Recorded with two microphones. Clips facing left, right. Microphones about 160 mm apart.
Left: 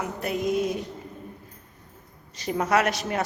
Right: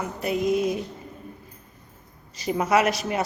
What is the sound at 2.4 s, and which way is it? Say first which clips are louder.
Speech: right 2 dB; 5° right (ahead or behind).